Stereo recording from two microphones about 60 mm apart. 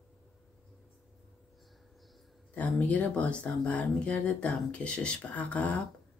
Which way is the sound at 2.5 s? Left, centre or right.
Left.